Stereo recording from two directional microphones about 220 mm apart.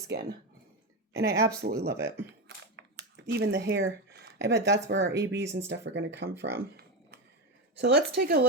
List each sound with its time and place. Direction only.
0.1 s speech: 45° right (ahead or behind)
1.2 s speech: 15° right (ahead or behind)
1.6 s speech: 45° right (ahead or behind)
2.0 s speech: 10° right (ahead or behind)
2.7 s speech: 50° right (ahead or behind)
6.4 s a sound: 45° right (ahead or behind)
7.8 s speech: 50° right (ahead or behind)